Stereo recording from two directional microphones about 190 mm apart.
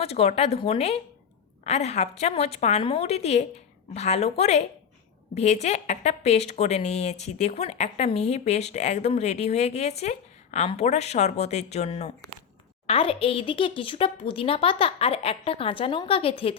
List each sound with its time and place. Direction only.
0.0 s a woman's voice: 35° left (ahead or behind)